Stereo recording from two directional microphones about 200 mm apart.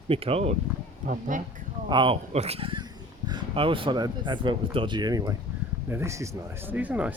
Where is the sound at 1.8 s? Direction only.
25° right (ahead or behind).